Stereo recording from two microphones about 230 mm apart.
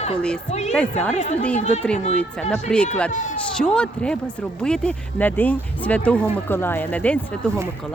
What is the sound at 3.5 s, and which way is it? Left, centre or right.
Speech, centre.